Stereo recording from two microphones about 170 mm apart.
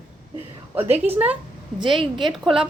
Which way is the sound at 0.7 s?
10° right (ahead or behind).